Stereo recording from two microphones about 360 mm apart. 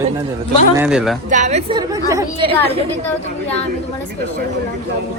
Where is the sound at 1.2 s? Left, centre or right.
Centre.